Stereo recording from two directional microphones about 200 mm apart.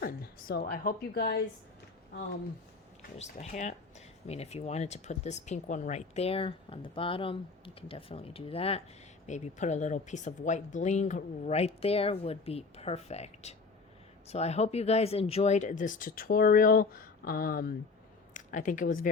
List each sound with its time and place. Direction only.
0.0 s a woman's voice: 50° left (ahead or behind)
3.2 s speech: 35° left (ahead or behind)